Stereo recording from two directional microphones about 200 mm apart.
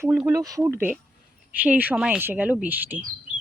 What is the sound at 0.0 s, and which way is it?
Speech, 10° right (ahead or behind).